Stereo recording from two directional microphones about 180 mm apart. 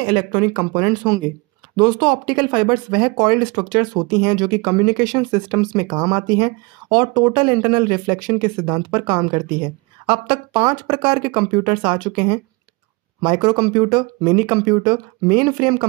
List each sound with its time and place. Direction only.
0.0 s speech: 25° right (ahead or behind)